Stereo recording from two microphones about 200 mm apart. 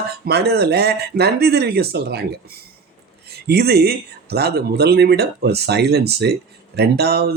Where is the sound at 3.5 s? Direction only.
55° right (ahead or behind).